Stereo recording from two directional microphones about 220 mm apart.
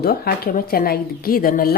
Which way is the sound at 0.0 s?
45° left (ahead or behind).